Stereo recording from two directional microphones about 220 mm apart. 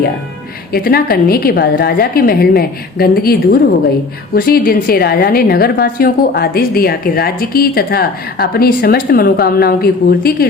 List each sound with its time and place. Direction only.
0.7 s a woman's voice: 45° left (ahead or behind)